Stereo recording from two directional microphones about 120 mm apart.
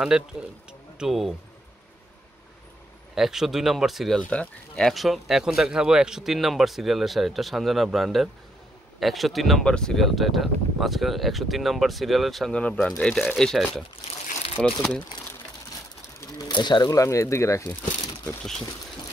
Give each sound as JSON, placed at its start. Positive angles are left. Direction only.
{"t": 0.0, "sound": "speech", "side_deg": -5}
{"t": 3.2, "sound": "speech", "side_deg": -5}
{"t": 4.2, "sound": "speech", "side_deg": 10}
{"t": 16.0, "sound": "pigeon", "side_deg": 25}
{"t": 16.4, "sound": "speech", "side_deg": 40}